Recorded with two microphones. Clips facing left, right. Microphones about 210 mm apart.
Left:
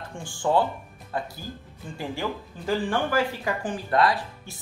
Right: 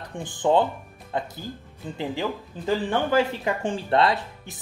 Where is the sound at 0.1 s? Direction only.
20° right (ahead or behind).